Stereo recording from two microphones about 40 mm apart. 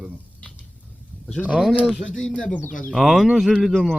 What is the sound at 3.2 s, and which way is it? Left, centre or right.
Speech, centre.